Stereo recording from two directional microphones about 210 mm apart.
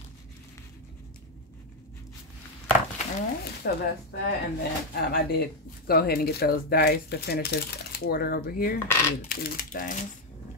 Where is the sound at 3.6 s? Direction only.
50° left (ahead or behind).